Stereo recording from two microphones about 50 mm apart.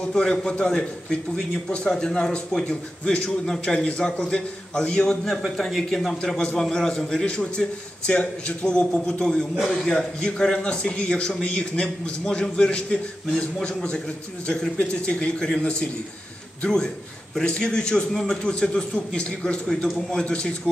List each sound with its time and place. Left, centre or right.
0.0 s a man's voice: left
5.2 s a man's voice: centre; by 20.7 s left